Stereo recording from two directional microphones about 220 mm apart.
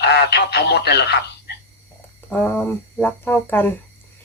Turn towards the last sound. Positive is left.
turn(degrees=10)  # may be behind; listen again after turning